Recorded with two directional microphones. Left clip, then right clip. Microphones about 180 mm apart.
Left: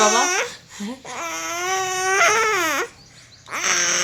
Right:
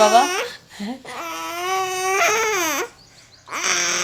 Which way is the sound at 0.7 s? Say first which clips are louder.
Right 1 dB; 45° right (ahead or behind).